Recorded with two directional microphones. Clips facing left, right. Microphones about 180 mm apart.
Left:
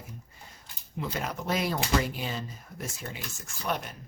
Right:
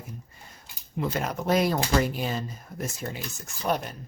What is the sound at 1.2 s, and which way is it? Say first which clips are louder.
Speech: right 6 dB; 45° right (ahead or behind).